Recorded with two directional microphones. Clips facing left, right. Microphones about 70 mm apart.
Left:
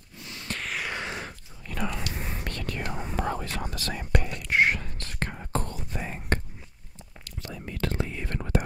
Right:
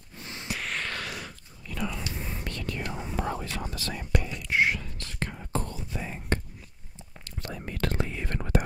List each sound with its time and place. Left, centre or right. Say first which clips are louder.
0.2 s a sound: right 1 dB; right
0.5 s a sound: even; centre
0.8 s a sound: left 2 dB; left
1.7 s whispering: left 1 dB; left
2.8 s whispering: left 1 dB; left
3.2 s whispering: left 2 dB; left
3.7 s whispering: left 1 dB; left
4.0 s whispering: left 1 dB; left
7.4 s whispering: even; right